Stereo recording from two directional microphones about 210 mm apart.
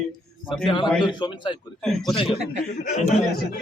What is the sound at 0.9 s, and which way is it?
Speech, 20° left (ahead or behind).